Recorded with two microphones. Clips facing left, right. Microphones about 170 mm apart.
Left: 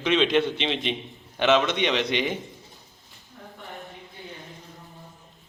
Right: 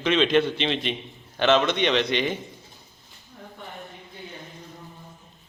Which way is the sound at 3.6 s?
Centre (ahead or behind).